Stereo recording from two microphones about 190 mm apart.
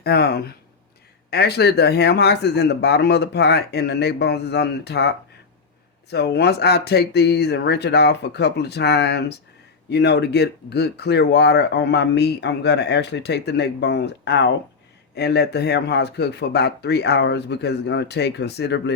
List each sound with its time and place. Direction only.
0.0 s speech: 55° left (ahead or behind)